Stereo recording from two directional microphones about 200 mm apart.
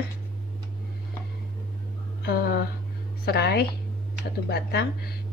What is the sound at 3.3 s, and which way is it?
A woman's voice, 55° left (ahead or behind).